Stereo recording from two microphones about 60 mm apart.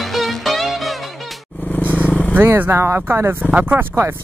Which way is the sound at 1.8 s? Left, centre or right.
Right.